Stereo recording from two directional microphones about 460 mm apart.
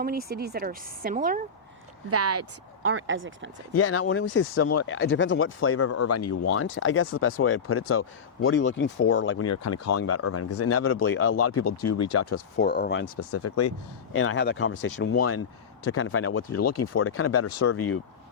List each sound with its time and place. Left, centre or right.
0.0 s speech: centre
2.0 s speech: right
3.8 s speech: left